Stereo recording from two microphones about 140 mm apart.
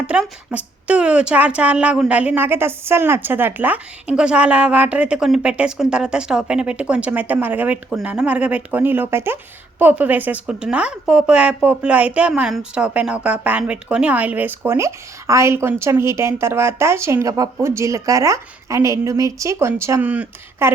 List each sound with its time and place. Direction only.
0.1 s speech: 10° right (ahead or behind)